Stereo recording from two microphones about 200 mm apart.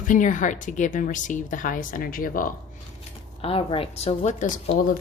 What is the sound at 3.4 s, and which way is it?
Speech, 30° left (ahead or behind).